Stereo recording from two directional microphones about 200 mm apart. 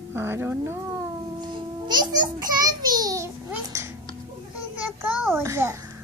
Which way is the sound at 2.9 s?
20° right (ahead or behind).